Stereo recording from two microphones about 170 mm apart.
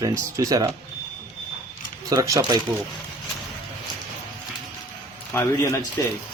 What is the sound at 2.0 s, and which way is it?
Speech, 20° right (ahead or behind).